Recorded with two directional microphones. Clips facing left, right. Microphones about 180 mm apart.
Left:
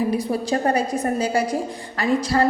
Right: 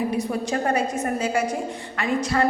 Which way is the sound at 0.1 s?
35° left (ahead or behind).